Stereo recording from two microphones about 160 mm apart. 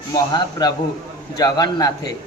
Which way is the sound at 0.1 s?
25° left (ahead or behind).